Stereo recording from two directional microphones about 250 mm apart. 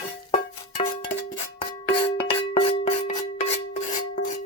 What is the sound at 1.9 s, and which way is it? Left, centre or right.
Music, left.